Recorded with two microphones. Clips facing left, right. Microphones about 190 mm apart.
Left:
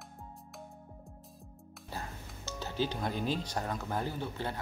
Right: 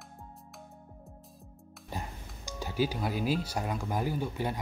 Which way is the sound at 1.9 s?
15° right (ahead or behind).